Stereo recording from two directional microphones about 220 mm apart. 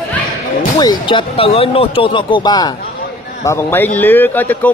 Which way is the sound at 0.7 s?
20° left (ahead or behind).